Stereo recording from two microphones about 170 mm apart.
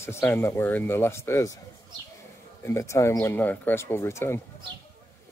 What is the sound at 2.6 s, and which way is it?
Speech, 15° left (ahead or behind).